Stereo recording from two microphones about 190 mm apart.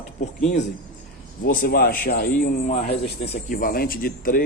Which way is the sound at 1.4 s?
50° left (ahead or behind).